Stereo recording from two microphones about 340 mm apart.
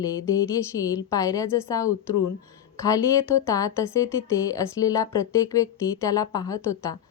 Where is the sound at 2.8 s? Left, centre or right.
Centre.